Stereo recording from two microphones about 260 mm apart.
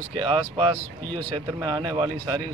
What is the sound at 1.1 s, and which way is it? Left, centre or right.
Speech, centre.